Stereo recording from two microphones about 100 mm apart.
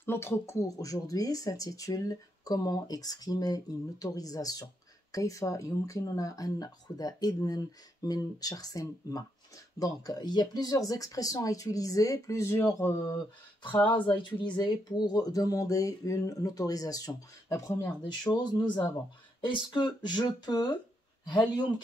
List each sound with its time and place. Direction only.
0.0 s speech: 25° left (ahead or behind)
13.9 s speech: 55° left (ahead or behind); by 17.7 s 35° left (ahead or behind)
18.3 s speech: 45° left (ahead or behind)